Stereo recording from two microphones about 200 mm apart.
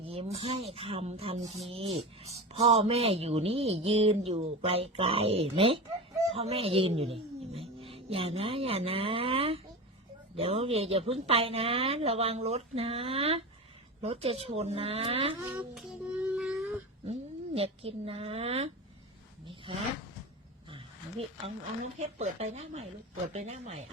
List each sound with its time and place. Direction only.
0.0 s speech: 30° right (ahead or behind)
15.4 s child singing: 5° right (ahead or behind)
16.3 s a sound: 5° right (ahead or behind)
17.1 s speech: 30° right (ahead or behind)
20.7 s a sound: 30° right (ahead or behind)
21.9 s speech: 35° right (ahead or behind)